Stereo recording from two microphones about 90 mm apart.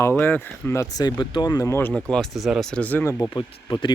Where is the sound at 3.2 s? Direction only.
60° left (ahead or behind).